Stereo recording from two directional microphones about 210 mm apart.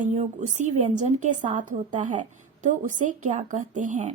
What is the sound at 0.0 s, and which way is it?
A woman's voice, 35° right (ahead or behind).